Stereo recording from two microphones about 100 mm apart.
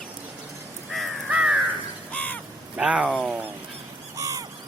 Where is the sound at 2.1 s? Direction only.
15° left (ahead or behind).